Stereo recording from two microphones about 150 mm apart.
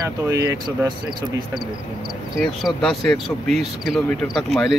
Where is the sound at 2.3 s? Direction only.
Centre (ahead or behind).